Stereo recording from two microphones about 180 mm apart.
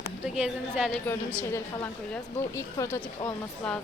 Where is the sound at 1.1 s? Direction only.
5° left (ahead or behind).